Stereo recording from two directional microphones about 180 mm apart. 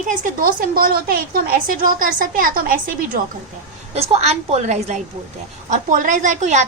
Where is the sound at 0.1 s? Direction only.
50° right (ahead or behind).